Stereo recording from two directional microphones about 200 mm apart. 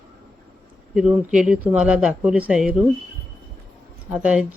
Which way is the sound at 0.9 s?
5° right (ahead or behind).